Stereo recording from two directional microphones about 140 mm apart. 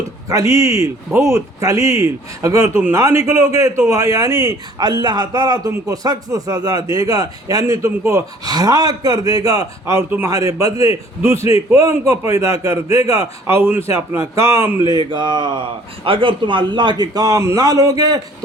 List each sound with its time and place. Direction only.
0.3 s speech: 25° right (ahead or behind)
14.9 s speech: 35° right (ahead or behind)